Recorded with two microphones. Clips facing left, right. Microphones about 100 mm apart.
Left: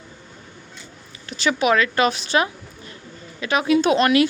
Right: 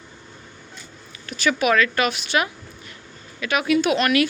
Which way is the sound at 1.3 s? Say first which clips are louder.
Left 1 dB; 25° left (ahead or behind).